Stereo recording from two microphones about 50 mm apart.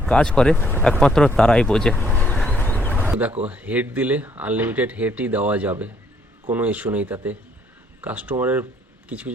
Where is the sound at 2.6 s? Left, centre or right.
Left.